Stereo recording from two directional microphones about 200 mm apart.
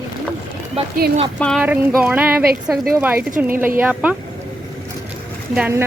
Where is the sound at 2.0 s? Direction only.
5° right (ahead or behind).